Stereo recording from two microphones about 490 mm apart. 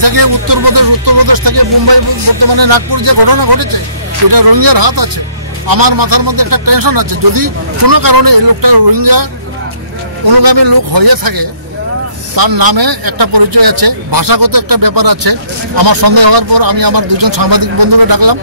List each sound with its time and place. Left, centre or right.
0.0 s a man's voice: right